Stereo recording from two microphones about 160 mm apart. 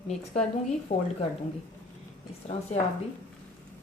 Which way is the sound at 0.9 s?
60° left (ahead or behind).